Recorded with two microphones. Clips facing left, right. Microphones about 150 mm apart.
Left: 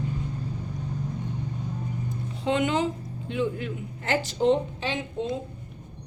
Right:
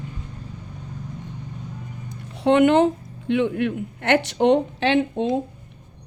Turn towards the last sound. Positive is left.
turn(degrees=-65)  # may be behind; listen again after turning